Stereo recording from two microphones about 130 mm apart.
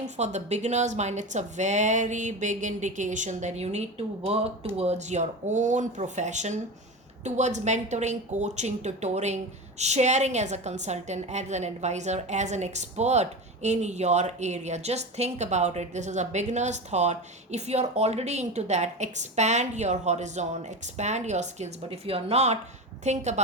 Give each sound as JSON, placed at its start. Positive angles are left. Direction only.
{"t": 0.0, "sound": "speech", "side_deg": -60}
{"t": 21.8, "sound": "speech", "side_deg": -50}